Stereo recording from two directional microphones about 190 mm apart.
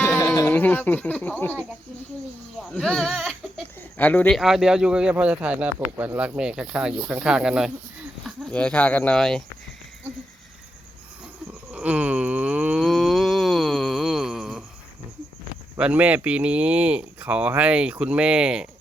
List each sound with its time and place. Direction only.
0.0 s speech: 15° left (ahead or behind)
2.7 s speech: 5° left (ahead or behind)
11.7 s a sound: 5° right (ahead or behind)
15.8 s speech: 5° right (ahead or behind)